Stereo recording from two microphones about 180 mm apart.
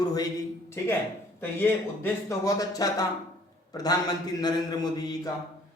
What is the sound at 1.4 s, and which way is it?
A man's voice, 10° left (ahead or behind).